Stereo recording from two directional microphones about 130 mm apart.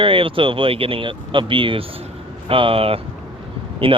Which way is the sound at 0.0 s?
45° right (ahead or behind).